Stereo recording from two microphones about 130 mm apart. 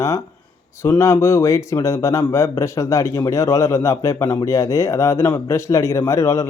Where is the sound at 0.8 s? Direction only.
20° left (ahead or behind).